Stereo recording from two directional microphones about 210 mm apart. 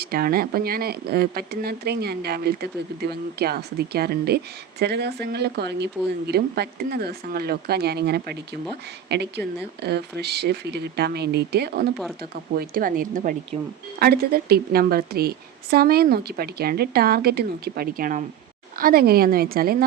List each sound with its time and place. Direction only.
0.0 s speech: 45° right (ahead or behind)